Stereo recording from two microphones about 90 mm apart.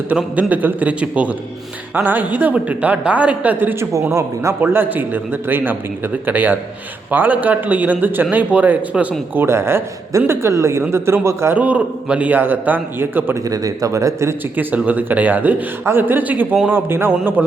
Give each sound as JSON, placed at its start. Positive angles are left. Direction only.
{"t": 0.1, "sound": "a man's voice", "side_deg": -15}
{"t": 11.5, "sound": "a man's voice", "side_deg": -15}
{"t": 13.5, "sound": "a man's voice", "side_deg": -40}
{"t": 14.5, "sound": "a man's voice", "side_deg": -20}